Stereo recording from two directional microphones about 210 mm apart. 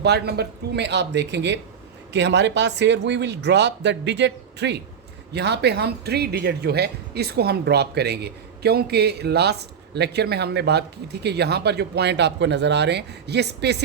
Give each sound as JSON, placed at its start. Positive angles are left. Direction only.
{"t": 0.0, "sound": "speech", "side_deg": -50}